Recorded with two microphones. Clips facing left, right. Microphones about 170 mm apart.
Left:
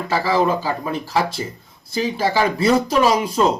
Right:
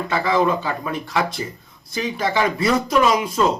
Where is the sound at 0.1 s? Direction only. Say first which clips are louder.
Left 1 dB; 35° left (ahead or behind).